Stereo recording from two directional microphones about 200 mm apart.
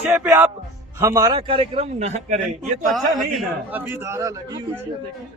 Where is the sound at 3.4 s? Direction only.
10° right (ahead or behind).